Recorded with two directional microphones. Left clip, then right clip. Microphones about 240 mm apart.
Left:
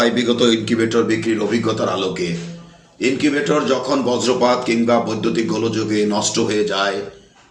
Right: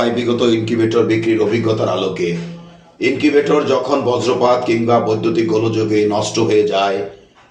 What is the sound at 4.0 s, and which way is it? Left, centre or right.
Speech, left.